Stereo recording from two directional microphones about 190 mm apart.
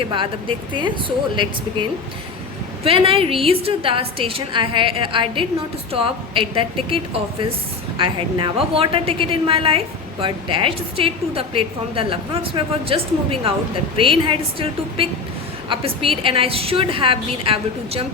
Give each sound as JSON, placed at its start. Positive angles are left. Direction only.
{"t": 0.1, "sound": "a woman's voice", "side_deg": -25}
{"t": 2.8, "sound": "a woman's voice", "side_deg": -30}